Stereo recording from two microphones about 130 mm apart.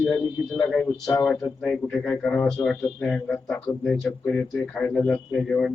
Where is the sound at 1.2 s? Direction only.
5° left (ahead or behind).